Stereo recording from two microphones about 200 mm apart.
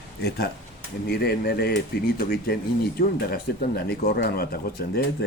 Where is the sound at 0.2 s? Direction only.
55° left (ahead or behind).